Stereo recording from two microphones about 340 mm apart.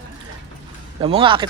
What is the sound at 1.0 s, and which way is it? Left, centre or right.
Speech, centre.